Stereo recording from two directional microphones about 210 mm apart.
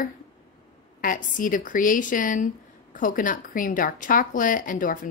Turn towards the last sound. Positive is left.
turn(degrees=40)  # may be behind; listen again after turning